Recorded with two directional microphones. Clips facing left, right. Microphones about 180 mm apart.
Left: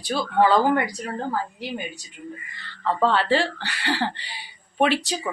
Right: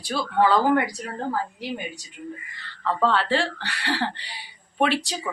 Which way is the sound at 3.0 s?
Centre (ahead or behind).